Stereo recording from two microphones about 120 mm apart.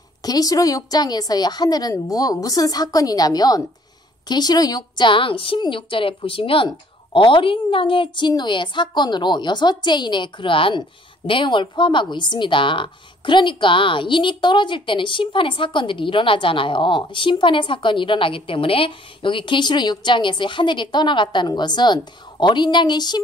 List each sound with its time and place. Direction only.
0.2 s a woman's voice: 30° left (ahead or behind)